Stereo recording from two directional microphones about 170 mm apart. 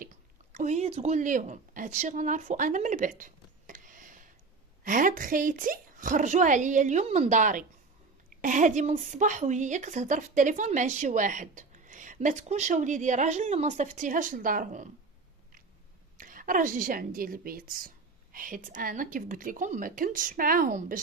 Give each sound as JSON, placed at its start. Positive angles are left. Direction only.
{"t": 0.5, "sound": "a woman's voice", "side_deg": -45}
{"t": 16.1, "sound": "a woman's voice", "side_deg": -50}